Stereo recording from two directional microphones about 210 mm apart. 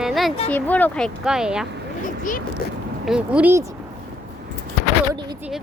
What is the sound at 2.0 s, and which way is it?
Zipper, 40° left (ahead or behind).